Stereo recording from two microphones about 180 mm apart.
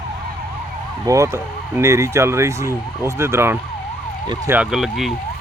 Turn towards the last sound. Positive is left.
turn(degrees=0)  # may be behind; listen again after turning